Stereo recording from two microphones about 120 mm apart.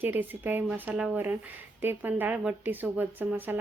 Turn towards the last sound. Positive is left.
turn(degrees=-15)  # may be behind; listen again after turning